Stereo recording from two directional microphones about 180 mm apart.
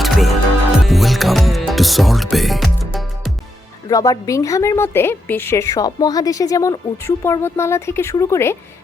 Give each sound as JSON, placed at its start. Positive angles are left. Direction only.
{"t": 0.0, "sound": "music", "side_deg": 0}
{"t": 0.9, "sound": "speech", "side_deg": 0}
{"t": 3.8, "sound": "a woman's voice", "side_deg": 20}